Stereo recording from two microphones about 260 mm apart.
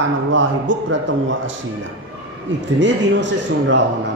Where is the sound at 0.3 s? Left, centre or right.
Right.